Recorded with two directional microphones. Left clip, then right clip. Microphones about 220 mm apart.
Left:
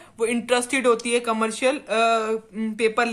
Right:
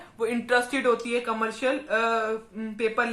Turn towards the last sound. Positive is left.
turn(degrees=40)  # may be behind; listen again after turning